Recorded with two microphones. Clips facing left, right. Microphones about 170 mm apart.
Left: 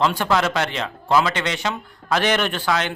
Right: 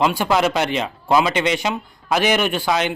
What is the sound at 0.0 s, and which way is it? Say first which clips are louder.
Speech: right 2 dB; 10° right (ahead or behind).